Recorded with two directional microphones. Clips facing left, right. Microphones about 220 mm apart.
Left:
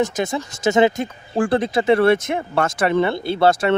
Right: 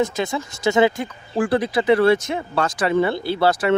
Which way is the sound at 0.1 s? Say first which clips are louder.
Left 1 dB; 20° left (ahead or behind).